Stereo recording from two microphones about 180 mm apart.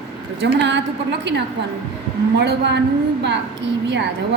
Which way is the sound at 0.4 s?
75° right (ahead or behind).